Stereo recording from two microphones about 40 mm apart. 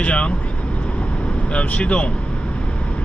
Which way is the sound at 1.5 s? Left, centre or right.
Left.